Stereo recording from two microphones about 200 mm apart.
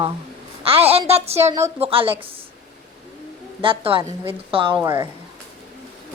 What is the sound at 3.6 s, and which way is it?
A woman's voice, 25° right (ahead or behind).